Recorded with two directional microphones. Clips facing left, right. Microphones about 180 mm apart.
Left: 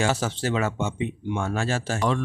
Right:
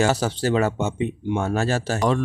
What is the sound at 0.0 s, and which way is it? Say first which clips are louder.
Speech: right 4 dB; 40° right (ahead or behind).